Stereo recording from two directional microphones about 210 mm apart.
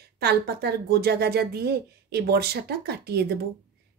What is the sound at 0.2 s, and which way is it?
Speech, 50° right (ahead or behind).